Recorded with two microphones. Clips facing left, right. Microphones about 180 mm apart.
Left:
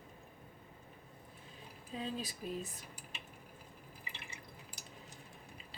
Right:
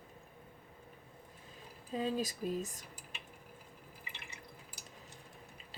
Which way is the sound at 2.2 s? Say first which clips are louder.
Right 5 dB; 45° right (ahead or behind).